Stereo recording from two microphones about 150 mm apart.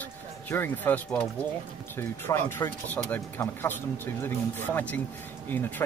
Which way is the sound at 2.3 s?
15° left (ahead or behind).